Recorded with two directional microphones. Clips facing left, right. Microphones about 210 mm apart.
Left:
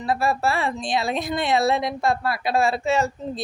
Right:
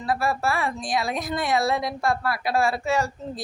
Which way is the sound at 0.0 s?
25° left (ahead or behind).